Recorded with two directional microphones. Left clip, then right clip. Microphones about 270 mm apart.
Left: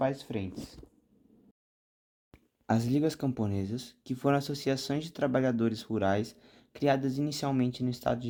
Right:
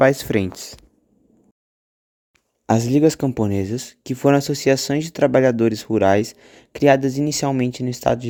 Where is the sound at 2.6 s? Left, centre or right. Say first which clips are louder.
Right 13 dB; right.